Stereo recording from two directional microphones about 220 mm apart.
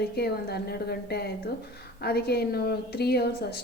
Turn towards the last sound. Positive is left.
turn(degrees=45)  # may be behind; listen again after turning